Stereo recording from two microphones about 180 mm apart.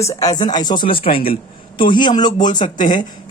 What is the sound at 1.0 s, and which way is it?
Speech, 55° left (ahead or behind).